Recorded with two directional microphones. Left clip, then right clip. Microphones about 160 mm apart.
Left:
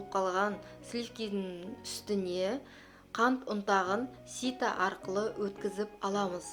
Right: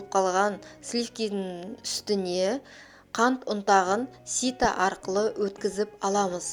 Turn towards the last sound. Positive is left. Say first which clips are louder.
# right 7 dB
turn(degrees=-40)  # may be behind; listen again after turning